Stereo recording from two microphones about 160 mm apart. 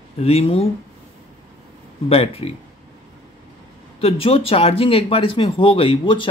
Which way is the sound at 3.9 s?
35° left (ahead or behind).